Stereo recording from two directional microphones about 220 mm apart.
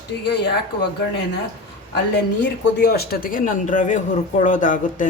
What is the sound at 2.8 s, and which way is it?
Speech, 45° left (ahead or behind).